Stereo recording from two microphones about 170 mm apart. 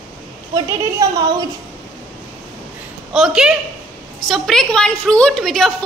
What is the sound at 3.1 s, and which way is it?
A woman's voice, centre (ahead or behind).